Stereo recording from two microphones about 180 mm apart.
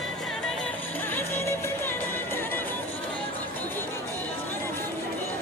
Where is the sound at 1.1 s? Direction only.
10° left (ahead or behind).